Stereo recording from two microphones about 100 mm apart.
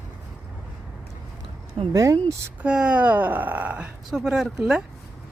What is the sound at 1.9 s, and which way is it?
Speech, 35° right (ahead or behind).